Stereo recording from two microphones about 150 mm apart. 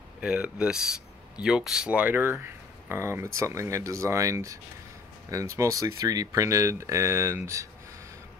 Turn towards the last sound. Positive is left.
turn(degrees=-20)  # may be behind; listen again after turning